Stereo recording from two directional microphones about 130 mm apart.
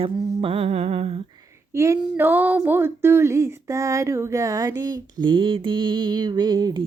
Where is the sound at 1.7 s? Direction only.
20° right (ahead or behind).